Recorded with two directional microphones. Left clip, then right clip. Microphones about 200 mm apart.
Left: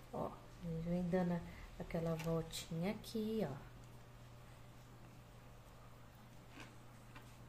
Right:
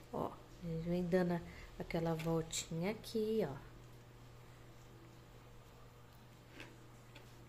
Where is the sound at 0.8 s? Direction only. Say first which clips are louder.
Right 4 dB; 25° right (ahead or behind).